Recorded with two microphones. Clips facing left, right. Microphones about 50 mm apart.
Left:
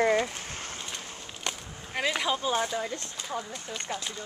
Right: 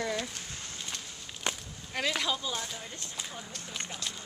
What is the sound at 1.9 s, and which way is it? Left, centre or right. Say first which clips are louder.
Speech: left 3 dB; centre.